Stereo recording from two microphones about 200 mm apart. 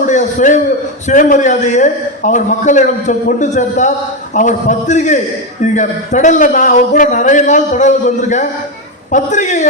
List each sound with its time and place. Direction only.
0.0 s a man's voice: 35° left (ahead or behind)